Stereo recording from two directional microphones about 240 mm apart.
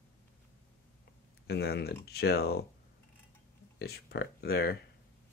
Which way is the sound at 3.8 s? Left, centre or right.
Left.